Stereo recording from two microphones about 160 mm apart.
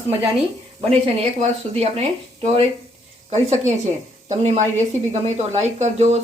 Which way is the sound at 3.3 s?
45° right (ahead or behind).